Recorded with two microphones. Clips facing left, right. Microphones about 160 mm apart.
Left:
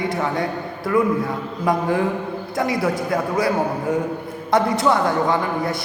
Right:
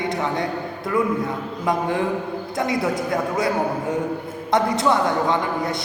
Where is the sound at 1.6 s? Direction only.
20° right (ahead or behind).